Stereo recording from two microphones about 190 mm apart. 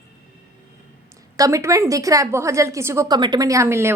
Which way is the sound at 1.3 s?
15° right (ahead or behind).